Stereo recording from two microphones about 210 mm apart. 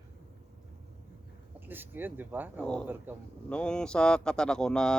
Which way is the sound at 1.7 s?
10° right (ahead or behind).